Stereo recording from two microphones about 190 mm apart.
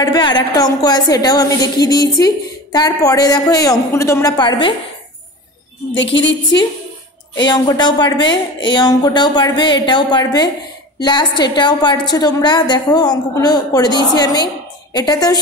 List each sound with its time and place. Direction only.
0.0 s a woman's voice: 20° left (ahead or behind)
5.9 s a woman's voice: 70° left (ahead or behind)
7.4 s a woman's voice: 20° left (ahead or behind)